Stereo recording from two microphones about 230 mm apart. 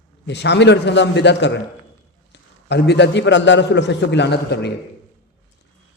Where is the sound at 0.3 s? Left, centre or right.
Left.